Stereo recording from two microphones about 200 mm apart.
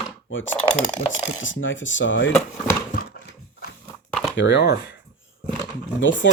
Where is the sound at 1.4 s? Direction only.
70° left (ahead or behind).